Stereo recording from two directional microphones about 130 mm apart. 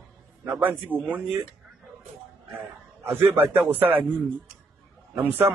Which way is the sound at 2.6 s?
15° right (ahead or behind).